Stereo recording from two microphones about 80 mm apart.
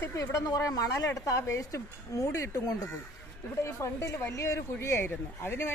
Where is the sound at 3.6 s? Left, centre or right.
Left.